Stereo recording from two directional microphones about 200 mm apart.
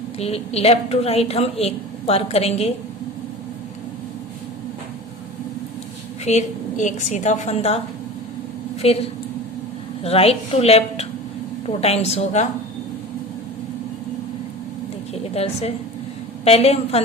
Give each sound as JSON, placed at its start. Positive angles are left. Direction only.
{"t": 0.2, "sound": "a woman's voice", "side_deg": 30}
{"t": 6.2, "sound": "a woman's voice", "side_deg": 35}
{"t": 8.8, "sound": "a woman's voice", "side_deg": 30}
{"t": 15.4, "sound": "a woman's voice", "side_deg": 30}